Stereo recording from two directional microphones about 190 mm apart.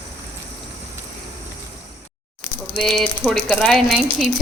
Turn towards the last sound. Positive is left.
turn(degrees=0)  # may be behind; listen again after turning